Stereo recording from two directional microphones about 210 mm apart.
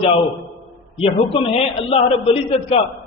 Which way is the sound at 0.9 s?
25° left (ahead or behind).